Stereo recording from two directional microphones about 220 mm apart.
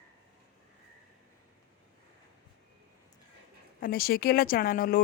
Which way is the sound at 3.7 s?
40° left (ahead or behind).